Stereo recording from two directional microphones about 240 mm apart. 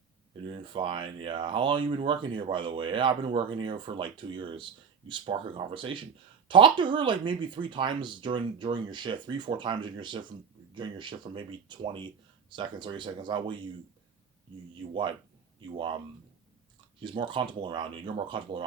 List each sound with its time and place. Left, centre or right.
0.4 s speech: right
17.0 s speech: centre